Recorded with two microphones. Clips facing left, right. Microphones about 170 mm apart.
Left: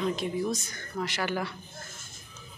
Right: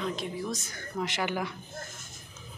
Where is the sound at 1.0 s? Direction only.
20° right (ahead or behind).